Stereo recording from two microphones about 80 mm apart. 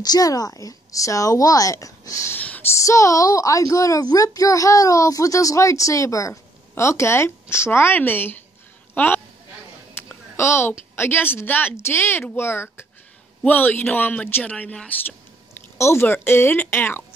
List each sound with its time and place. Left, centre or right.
0.0 s a child's voice: left
2.3 s a sound: centre
2.7 s a child's voice: left
4.0 s a child's voice: left
8.9 s a sound: left
9.9 s a woman's voice: left